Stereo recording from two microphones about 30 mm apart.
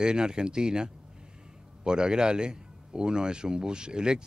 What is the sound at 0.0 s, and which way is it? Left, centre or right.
Speech, right.